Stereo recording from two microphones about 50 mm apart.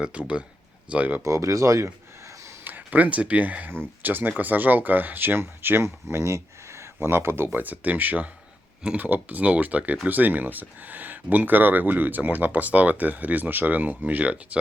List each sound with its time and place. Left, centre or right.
0.0 s speech: right
1.2 s speech: right
2.6 s a sound: right
3.1 s speech: right